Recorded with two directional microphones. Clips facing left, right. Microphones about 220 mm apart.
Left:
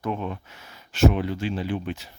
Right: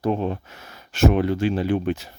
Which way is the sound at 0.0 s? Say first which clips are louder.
Right 6 dB; 35° right (ahead or behind).